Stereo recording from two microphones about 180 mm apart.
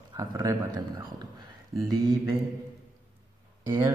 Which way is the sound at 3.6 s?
15° right (ahead or behind).